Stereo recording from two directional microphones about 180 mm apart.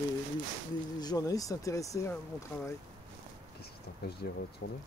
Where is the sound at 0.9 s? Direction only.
20° left (ahead or behind).